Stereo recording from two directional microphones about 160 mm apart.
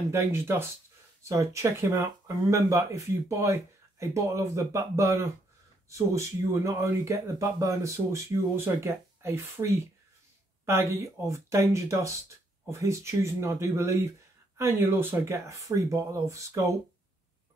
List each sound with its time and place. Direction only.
0.1 s speech: 15° right (ahead or behind)